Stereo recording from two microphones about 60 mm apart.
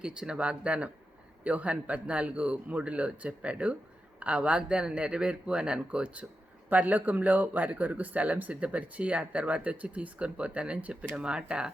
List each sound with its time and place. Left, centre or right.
0.0 s speech: centre